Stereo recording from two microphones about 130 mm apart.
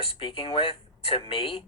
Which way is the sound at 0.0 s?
45° left (ahead or behind).